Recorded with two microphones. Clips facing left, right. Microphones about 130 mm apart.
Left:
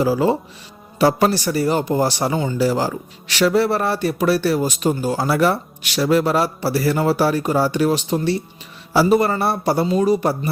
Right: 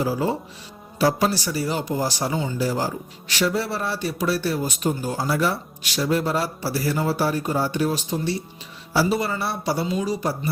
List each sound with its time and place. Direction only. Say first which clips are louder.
0.0 s speech: left 6 dB; 85° left
0.9 s a man's voice: left 5 dB; 65° left (ahead or behind)